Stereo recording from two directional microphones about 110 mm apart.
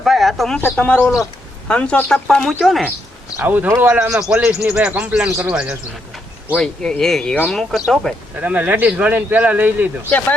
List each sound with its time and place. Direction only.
0.0 s speech: centre (ahead or behind)
0.6 s speech: 15° left (ahead or behind); by 2.9 s centre (ahead or behind)
3.4 s a man's voice: 15° right (ahead or behind)
6.6 s speech: 5° left (ahead or behind)
8.4 s a man's voice: 15° right (ahead or behind)
10.1 s speech: 15° left (ahead or behind)